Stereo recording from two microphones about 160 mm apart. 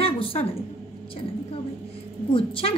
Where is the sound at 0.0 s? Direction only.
35° left (ahead or behind).